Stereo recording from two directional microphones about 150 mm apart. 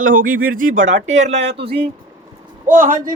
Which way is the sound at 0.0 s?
65° right (ahead or behind).